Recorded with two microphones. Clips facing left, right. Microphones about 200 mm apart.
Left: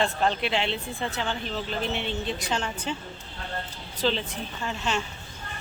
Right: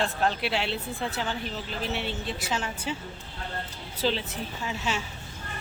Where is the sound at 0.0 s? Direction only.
5° right (ahead or behind).